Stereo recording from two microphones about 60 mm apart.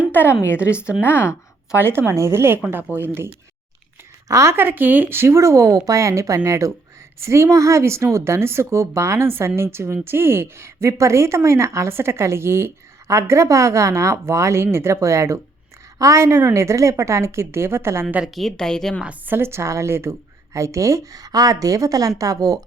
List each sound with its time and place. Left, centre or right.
0.1 s a woman's voice: left
1.8 s speech: right
4.3 s speech: right
4.5 s speech: right
13.1 s speech: right
16.0 s a woman's voice: right
16.2 s speech: right
18.3 s a woman's voice: centre
19.0 s a woman's voice: right
19.4 s a woman's voice: right